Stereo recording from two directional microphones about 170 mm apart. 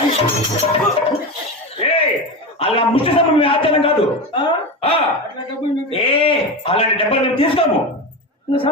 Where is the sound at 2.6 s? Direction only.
35° left (ahead or behind).